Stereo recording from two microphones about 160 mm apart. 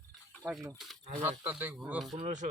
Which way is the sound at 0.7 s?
Centre (ahead or behind).